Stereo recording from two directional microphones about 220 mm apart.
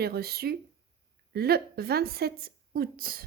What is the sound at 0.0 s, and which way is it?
A woman's voice, 45° right (ahead or behind).